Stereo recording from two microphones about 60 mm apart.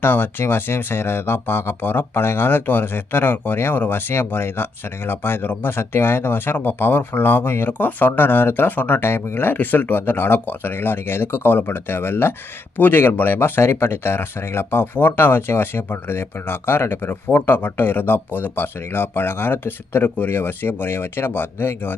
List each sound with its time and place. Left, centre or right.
0.0 s speech: left